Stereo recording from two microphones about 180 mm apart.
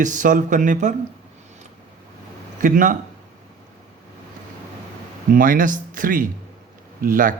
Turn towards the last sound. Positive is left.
turn(degrees=-50)  # may be behind; listen again after turning